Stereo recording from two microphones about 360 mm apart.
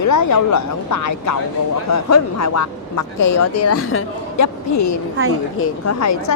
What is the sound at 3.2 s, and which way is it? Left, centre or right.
A woman's voice, left.